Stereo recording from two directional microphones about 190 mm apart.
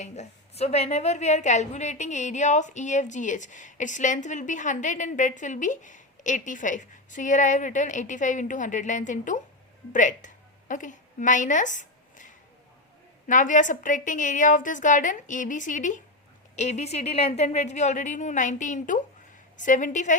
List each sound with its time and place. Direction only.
0.0 s a woman's voice: 35° left (ahead or behind)